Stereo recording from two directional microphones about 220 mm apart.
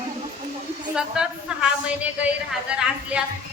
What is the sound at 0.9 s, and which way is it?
A woman's voice, 5° right (ahead or behind).